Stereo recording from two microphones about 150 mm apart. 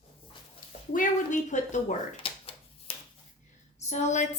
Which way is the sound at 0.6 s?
65° left (ahead or behind).